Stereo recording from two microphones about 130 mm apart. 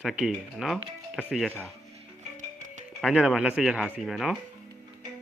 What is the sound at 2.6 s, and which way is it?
Music, 70° right (ahead or behind).